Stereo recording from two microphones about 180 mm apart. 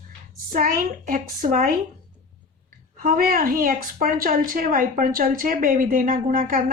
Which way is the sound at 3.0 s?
55° right (ahead or behind).